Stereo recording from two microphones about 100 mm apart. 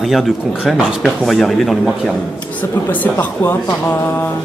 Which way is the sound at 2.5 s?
20° left (ahead or behind).